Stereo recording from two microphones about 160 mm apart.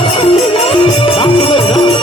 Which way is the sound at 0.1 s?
35° left (ahead or behind).